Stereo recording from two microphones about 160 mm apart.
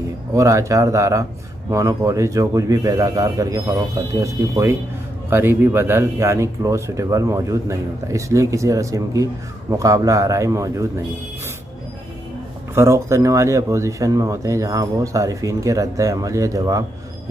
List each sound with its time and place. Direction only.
0.3 s speech: 20° right (ahead or behind)
12.7 s speech: 20° right (ahead or behind)